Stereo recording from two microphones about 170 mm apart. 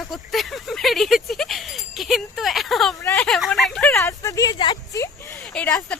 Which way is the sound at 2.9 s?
20° left (ahead or behind).